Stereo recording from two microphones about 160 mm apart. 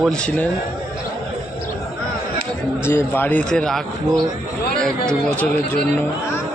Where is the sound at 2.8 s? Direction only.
15° left (ahead or behind).